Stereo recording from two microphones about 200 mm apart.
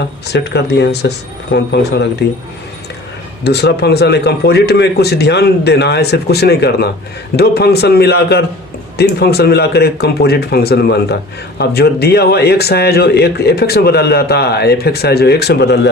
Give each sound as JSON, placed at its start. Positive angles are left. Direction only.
{"t": 0.3, "sound": "a man's voice", "side_deg": 55}
{"t": 3.4, "sound": "a man's voice", "side_deg": 55}